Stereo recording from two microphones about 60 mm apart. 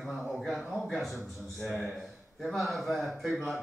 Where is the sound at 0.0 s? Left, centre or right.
Centre.